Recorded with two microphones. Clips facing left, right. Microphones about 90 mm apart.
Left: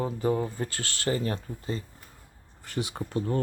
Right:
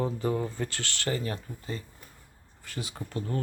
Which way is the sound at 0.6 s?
35° left (ahead or behind).